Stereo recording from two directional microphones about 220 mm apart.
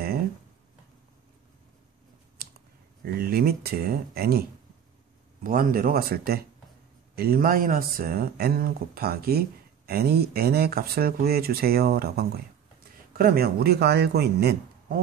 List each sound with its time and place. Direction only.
3.0 s speech: 45° right (ahead or behind)